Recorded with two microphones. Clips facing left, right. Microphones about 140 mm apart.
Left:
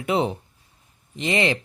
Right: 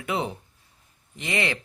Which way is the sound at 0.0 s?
25° left (ahead or behind).